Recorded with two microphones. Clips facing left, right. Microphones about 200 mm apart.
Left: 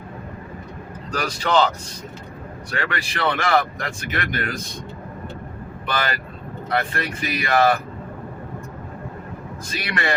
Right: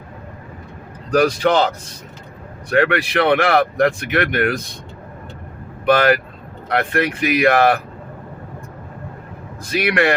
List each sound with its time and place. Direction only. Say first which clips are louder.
1.1 s speech: right 6 dB; 55° right (ahead or behind)
5.8 s speech: right 12 dB; 70° right (ahead or behind)
9.7 s speech: right 8 dB; 65° right (ahead or behind)